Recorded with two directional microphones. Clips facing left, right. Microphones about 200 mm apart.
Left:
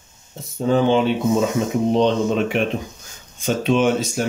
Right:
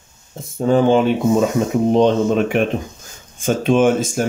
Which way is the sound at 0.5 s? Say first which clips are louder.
Right 3 dB; 50° right (ahead or behind).